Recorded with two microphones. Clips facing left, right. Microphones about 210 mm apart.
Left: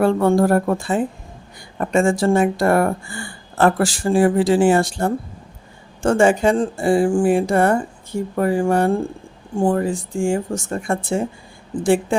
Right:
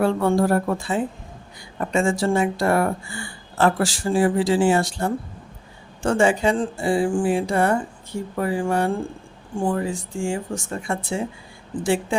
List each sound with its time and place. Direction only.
0.0 s speech: 45° left (ahead or behind)